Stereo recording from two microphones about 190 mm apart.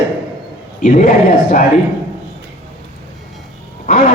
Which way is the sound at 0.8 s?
45° left (ahead or behind).